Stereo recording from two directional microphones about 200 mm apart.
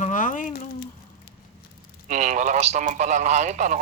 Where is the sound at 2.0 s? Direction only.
35° right (ahead or behind).